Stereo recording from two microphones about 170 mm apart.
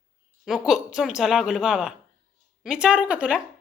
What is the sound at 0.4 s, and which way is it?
A woman's voice, centre (ahead or behind).